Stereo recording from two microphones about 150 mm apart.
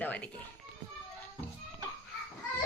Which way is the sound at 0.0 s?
10° left (ahead or behind).